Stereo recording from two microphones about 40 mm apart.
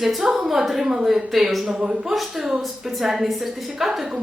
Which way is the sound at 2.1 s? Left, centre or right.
Centre.